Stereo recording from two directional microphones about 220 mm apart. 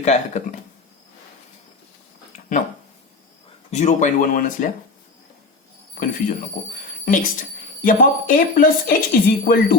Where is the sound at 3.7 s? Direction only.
30° left (ahead or behind).